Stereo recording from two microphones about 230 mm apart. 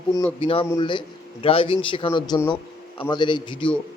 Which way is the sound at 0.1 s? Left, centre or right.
Centre.